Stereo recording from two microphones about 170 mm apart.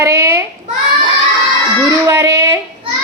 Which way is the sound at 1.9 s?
20° right (ahead or behind).